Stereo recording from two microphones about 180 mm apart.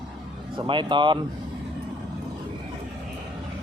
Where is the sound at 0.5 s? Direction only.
25° right (ahead or behind).